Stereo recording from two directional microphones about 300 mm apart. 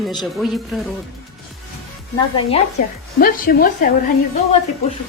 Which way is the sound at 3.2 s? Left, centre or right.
Left.